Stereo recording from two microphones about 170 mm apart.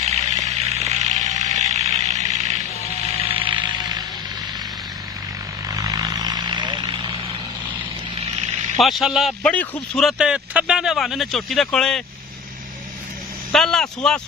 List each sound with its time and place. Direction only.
0.0 s a sound: 40° right (ahead or behind)
3.3 s music: 30° right (ahead or behind)
5.7 s vehicle: 20° right (ahead or behind)
8.7 s a man's voice: centre (ahead or behind)
13.5 s a man's voice: centre (ahead or behind)